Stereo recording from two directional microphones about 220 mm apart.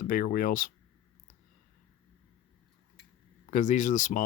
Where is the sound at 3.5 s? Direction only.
35° left (ahead or behind).